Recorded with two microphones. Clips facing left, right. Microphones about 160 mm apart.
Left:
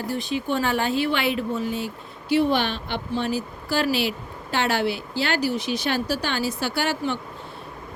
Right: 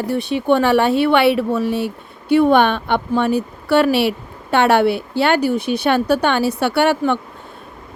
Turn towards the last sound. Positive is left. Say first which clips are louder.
# right 9 dB
turn(degrees=-65)  # may be behind; listen again after turning